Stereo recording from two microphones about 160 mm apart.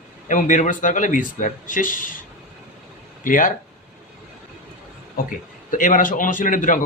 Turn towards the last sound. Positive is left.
turn(degrees=55)  # may be behind; listen again after turning